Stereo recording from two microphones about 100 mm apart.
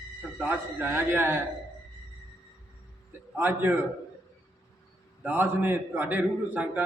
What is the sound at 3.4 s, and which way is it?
Speech, 20° right (ahead or behind).